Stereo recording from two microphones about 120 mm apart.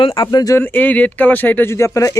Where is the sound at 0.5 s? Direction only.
15° left (ahead or behind).